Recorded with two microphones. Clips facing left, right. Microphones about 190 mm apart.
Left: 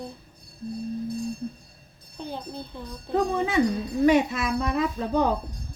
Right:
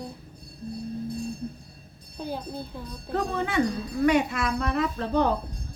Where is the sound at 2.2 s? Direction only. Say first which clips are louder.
Right 2 dB; 5° right (ahead or behind).